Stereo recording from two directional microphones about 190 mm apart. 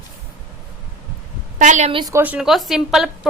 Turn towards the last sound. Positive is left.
turn(degrees=0)  # may be behind; listen again after turning